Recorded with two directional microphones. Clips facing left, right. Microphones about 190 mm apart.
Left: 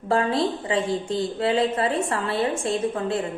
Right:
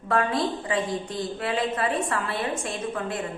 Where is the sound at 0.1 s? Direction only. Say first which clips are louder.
Left 2 dB; 30° left (ahead or behind).